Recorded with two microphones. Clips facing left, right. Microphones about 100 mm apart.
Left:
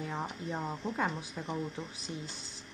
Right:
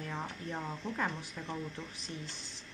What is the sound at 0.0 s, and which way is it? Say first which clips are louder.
Speech: left 3 dB; 15° left (ahead or behind).